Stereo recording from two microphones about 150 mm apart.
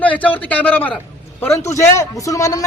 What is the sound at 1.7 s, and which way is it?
Speech, 20° left (ahead or behind).